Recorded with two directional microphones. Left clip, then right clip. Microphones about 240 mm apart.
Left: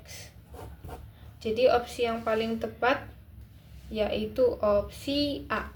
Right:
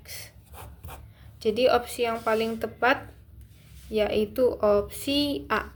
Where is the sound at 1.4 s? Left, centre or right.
Right.